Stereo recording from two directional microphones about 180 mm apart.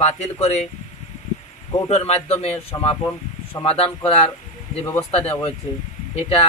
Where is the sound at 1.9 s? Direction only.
35° left (ahead or behind).